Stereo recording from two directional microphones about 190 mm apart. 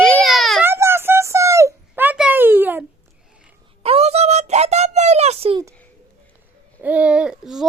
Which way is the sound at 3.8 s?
30° right (ahead or behind).